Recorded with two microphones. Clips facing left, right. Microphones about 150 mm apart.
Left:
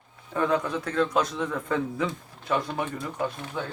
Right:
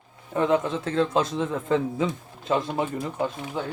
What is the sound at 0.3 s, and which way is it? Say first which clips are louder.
A man's voice: right 3 dB; 20° right (ahead or behind).